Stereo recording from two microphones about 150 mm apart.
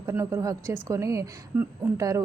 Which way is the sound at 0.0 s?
20° right (ahead or behind).